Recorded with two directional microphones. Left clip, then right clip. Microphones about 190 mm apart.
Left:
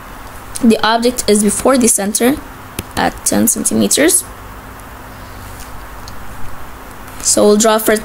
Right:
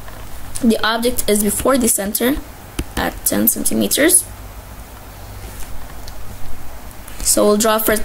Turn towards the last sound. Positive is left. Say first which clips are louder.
# left 4 dB
turn(degrees=25)  # may be behind; listen again after turning